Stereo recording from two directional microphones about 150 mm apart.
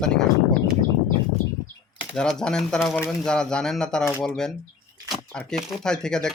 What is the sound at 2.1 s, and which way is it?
Speech, 5° left (ahead or behind).